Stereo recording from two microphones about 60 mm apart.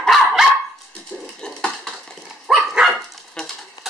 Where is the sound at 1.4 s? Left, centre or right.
Centre.